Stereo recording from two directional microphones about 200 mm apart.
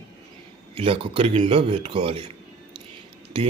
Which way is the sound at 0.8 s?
25° right (ahead or behind).